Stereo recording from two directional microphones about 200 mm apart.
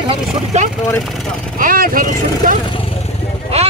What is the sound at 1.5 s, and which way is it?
Speech, 45° right (ahead or behind).